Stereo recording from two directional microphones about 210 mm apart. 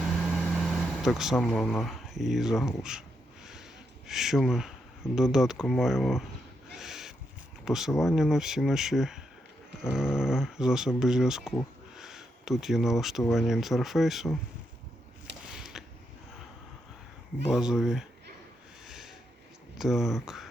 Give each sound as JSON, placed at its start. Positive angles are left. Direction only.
{"t": 0.2, "sound": "speech", "side_deg": 0}
{"t": 4.0, "sound": "speech", "side_deg": 0}
{"t": 6.7, "sound": "owl", "side_deg": 0}
{"t": 7.6, "sound": "speech", "side_deg": 0}
{"t": 11.9, "sound": "a sound", "side_deg": 0}
{"t": 13.3, "sound": "speech", "side_deg": 0}
{"t": 15.5, "sound": "a sound", "side_deg": 0}
{"t": 17.5, "sound": "speech", "side_deg": 0}
{"t": 18.9, "sound": "a sound", "side_deg": 0}
{"t": 19.7, "sound": "speech", "side_deg": 0}